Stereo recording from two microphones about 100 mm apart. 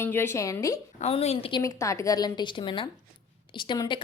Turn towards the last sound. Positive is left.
turn(degrees=50)  # may be behind; listen again after turning